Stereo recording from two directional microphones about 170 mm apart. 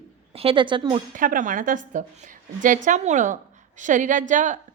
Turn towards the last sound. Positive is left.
turn(degrees=-45)  # may be behind; listen again after turning